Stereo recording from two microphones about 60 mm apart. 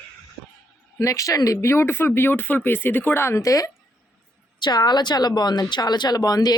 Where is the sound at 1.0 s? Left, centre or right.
Left.